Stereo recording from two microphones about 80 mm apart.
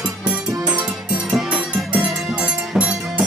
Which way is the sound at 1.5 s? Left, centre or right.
Centre.